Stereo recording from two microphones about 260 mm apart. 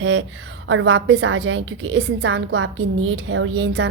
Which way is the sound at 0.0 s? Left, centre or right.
Right.